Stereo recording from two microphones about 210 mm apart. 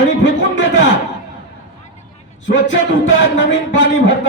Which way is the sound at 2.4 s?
60° left (ahead or behind).